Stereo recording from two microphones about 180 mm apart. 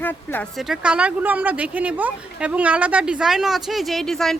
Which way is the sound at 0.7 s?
5° right (ahead or behind).